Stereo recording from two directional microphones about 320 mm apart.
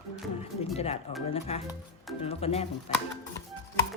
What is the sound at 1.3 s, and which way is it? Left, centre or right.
Speech, centre.